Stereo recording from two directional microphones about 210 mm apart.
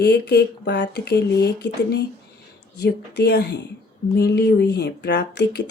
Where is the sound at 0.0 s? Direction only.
50° left (ahead or behind).